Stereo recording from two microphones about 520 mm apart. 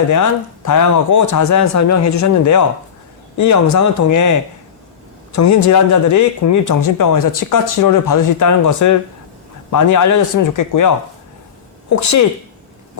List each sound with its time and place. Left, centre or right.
0.1 s speech: left